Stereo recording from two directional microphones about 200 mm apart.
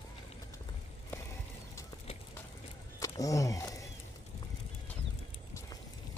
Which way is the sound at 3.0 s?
15° left (ahead or behind).